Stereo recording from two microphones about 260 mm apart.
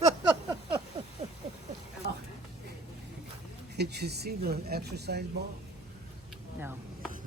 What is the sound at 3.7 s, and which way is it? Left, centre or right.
Speech, right.